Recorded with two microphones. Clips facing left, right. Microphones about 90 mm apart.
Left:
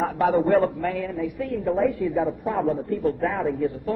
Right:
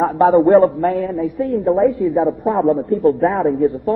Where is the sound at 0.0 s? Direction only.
35° right (ahead or behind).